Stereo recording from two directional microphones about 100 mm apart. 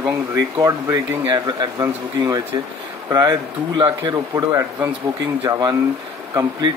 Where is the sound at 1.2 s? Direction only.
45° right (ahead or behind).